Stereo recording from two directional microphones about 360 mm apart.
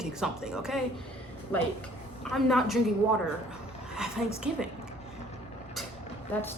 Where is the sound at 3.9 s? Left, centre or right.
Centre.